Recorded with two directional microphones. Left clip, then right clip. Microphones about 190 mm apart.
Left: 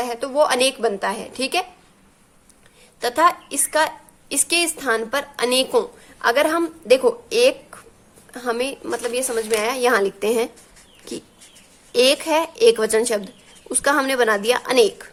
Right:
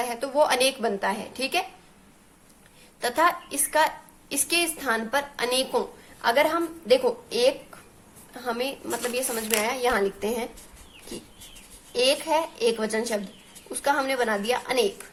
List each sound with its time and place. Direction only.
0.0 s a woman's voice: 25° left (ahead or behind)
3.0 s a woman's voice: 25° left (ahead or behind)
11.9 s a woman's voice: 35° left (ahead or behind)